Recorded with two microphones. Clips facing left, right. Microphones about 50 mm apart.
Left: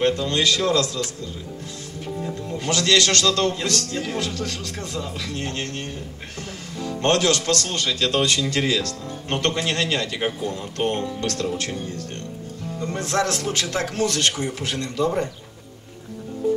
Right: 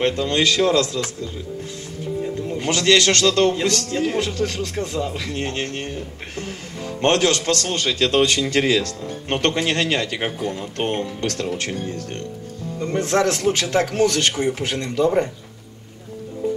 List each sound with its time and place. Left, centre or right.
0.0 s a man's voice: right
2.5 s a man's voice: right
12.8 s a man's voice: right